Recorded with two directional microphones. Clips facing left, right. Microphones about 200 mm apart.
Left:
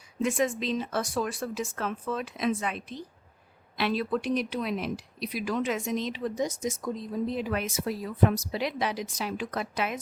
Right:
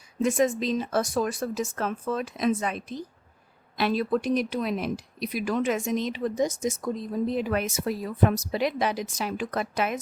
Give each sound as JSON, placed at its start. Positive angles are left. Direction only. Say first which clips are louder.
{"t": 0.2, "sound": "speech", "louder": "right 4 dB", "side_deg": -40}